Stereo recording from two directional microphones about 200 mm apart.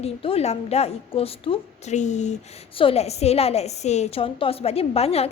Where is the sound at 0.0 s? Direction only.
30° left (ahead or behind).